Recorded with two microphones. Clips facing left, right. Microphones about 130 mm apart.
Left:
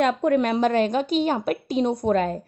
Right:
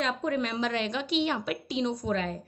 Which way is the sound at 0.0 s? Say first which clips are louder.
Left 9 dB; 55° left (ahead or behind).